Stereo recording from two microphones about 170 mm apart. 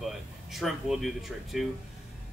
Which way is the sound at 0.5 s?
Centre (ahead or behind).